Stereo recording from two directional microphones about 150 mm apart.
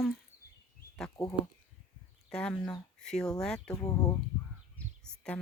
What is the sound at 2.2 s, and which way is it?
Speech, 5° left (ahead or behind).